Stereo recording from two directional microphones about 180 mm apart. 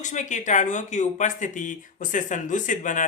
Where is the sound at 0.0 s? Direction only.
45° left (ahead or behind).